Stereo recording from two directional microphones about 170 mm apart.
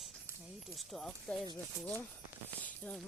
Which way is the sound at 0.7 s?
Centre (ahead or behind).